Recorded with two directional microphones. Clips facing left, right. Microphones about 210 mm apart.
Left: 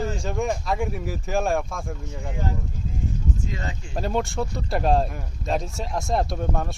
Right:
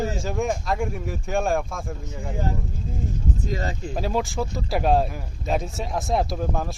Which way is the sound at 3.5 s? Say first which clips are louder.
Right 5 dB; 35° right (ahead or behind).